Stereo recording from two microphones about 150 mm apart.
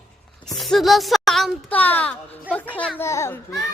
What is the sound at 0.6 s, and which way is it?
A child's voice, centre (ahead or behind).